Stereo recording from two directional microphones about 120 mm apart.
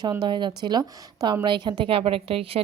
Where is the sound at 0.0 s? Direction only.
35° right (ahead or behind).